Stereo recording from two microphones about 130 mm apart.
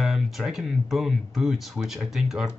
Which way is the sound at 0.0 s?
5° right (ahead or behind).